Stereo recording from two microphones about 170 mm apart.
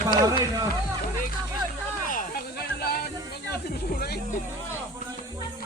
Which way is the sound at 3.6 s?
70° left (ahead or behind).